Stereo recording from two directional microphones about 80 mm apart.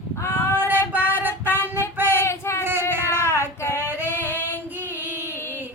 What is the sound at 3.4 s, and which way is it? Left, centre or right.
Female singing, right.